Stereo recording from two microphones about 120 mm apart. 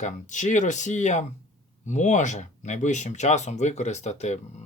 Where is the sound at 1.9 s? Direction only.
90° left.